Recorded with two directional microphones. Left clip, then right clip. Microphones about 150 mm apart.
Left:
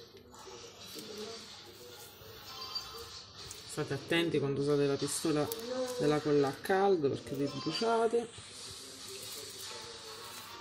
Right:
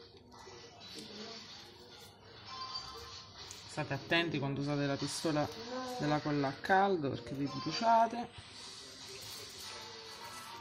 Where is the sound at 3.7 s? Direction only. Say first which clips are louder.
Left 1 dB; 55° right (ahead or behind); by 7.1 s 40° right (ahead or behind).